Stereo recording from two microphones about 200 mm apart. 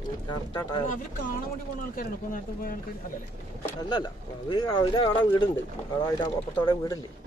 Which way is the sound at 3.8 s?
20° left (ahead or behind).